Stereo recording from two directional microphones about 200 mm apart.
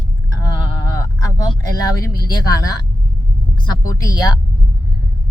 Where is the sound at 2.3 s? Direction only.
20° left (ahead or behind).